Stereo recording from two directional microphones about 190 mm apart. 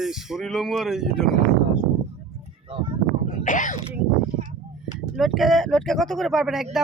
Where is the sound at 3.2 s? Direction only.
40° left (ahead or behind).